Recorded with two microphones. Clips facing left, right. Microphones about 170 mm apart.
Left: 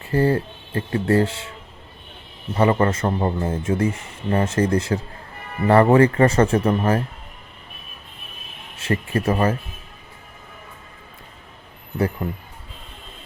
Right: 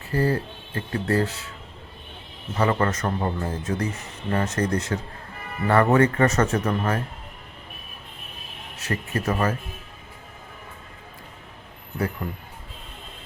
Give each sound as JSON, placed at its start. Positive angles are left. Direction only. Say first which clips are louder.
{"t": 0.0, "sound": "speech", "louder": "left 4 dB", "side_deg": 30}
{"t": 2.6, "sound": "speech", "louder": "left 4 dB", "side_deg": 25}
{"t": 8.7, "sound": "speech", "louder": "left 5 dB", "side_deg": 30}